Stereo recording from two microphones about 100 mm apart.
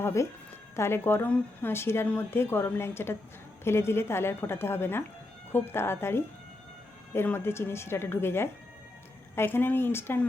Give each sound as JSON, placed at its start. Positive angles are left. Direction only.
{"t": 0.0, "sound": "a woman's voice", "side_deg": 30}